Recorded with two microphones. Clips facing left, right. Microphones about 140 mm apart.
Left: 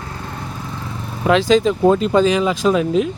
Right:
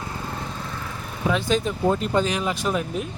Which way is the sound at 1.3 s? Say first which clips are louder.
Left 9 dB; 90° left.